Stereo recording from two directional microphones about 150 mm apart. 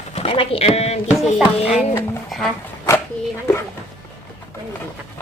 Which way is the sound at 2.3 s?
5° left (ahead or behind).